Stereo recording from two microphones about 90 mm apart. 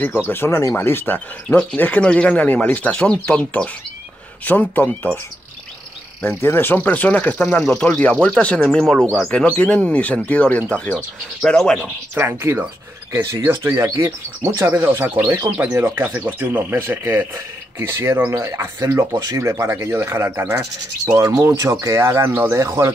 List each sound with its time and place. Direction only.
0.3 s speech: 30° left (ahead or behind)
0.7 s speech: 25° left (ahead or behind)
6.2 s speech: 25° left (ahead or behind); by 9.0 s 5° left (ahead or behind)
9.5 s speech: 15° left (ahead or behind)
12.2 s speech: 25° right (ahead or behind)
14.8 s speech: 20° right (ahead or behind)
19.1 s speech: 40° right (ahead or behind)